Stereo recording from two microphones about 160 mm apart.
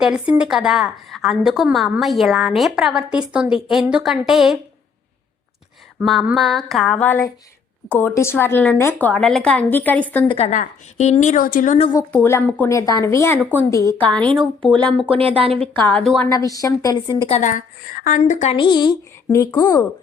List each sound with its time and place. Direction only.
0.0 s a woman's voice: 5° right (ahead or behind)
6.0 s a woman's voice: 5° right (ahead or behind)
10.2 s a woman's voice: 40° left (ahead or behind); by 11.8 s 55° left (ahead or behind)
11.9 s a woman's voice: 15° left (ahead or behind)
14.2 s a woman's voice: 5° left (ahead or behind)
15.1 s speech: 35° right (ahead or behind)
15.9 s a woman's voice: 5° left (ahead or behind)
16.3 s a woman's voice: 20° left (ahead or behind)
17.2 s a woman's voice: 45° left (ahead or behind)
18.5 s a woman's voice: 30° left (ahead or behind)